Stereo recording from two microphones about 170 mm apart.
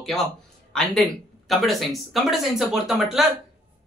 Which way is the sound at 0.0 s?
Centre (ahead or behind).